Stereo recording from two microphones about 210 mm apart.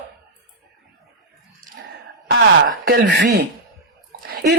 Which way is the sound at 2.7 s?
50° right (ahead or behind).